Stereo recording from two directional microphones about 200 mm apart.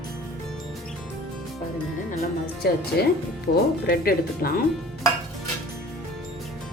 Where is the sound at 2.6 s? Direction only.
55° left (ahead or behind).